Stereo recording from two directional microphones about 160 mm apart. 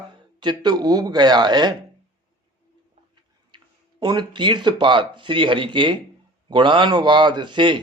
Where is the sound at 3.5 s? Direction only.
30° right (ahead or behind).